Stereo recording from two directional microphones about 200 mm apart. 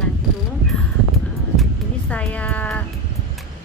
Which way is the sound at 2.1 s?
5° left (ahead or behind).